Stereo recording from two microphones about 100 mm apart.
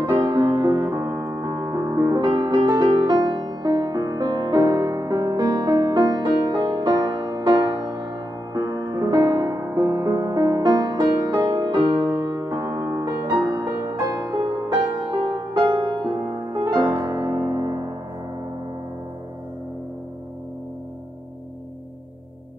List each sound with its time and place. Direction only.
0.0 s music: 45° right (ahead or behind)
0.8 s music: 25° right (ahead or behind)
13.3 s music: 50° right (ahead or behind)